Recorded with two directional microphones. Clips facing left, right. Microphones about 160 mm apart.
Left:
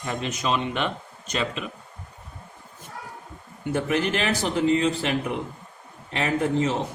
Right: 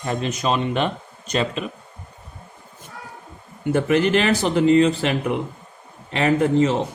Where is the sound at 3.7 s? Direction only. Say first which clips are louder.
Right 6 dB; 75° right (ahead or behind).